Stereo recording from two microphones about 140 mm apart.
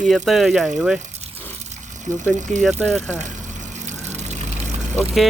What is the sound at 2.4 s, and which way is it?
Speech, 60° right (ahead or behind).